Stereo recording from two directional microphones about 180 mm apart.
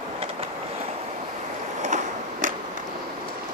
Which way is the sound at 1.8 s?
45° right (ahead or behind).